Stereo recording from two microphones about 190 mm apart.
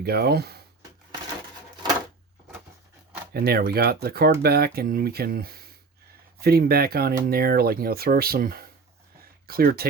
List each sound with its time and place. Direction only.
0.0 s speech: 55° right (ahead or behind)
3.3 s speech: 55° right (ahead or behind)